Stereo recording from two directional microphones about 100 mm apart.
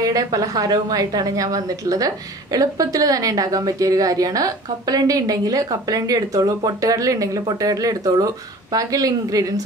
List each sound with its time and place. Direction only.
0.0 s a woman's voice: 40° right (ahead or behind)